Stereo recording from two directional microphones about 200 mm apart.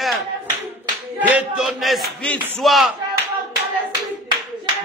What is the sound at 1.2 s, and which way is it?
A man's voice, 5° right (ahead or behind).